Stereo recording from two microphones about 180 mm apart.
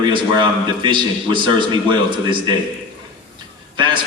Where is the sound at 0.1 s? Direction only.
25° right (ahead or behind).